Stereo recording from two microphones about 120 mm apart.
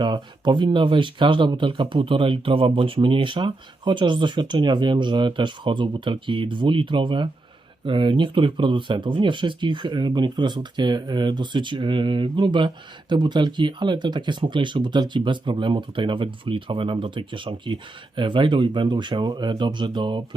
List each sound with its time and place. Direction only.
0.0 s speech: 40° right (ahead or behind)